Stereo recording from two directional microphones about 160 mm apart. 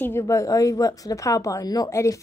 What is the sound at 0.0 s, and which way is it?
A woman's voice, 15° left (ahead or behind).